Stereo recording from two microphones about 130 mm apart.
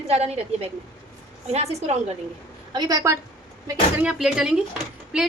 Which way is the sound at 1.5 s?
55° right (ahead or behind).